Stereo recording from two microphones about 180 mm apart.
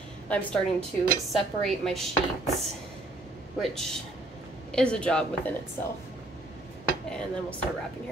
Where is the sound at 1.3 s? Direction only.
Centre (ahead or behind).